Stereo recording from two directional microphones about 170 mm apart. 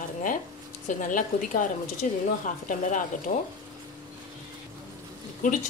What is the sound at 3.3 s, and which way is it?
Speech, 50° left (ahead or behind).